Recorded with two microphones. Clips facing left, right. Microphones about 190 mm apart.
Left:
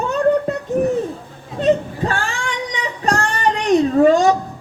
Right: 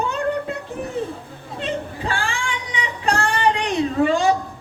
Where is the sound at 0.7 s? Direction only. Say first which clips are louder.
Left 16 dB; 55° left (ahead or behind).